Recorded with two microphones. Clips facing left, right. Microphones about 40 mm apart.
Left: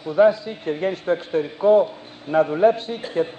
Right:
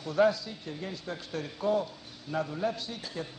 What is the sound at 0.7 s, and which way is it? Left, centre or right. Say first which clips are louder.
Speech: left 17 dB; left.